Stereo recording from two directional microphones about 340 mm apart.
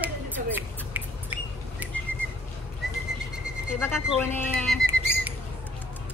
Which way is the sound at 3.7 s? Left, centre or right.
Centre.